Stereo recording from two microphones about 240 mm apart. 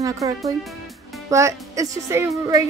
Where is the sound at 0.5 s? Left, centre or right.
Centre.